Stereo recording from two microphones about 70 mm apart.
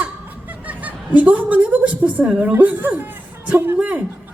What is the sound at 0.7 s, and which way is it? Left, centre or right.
Chuckle, right.